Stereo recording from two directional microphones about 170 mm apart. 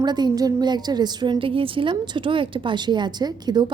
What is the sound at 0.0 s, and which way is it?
A woman's voice, 25° right (ahead or behind).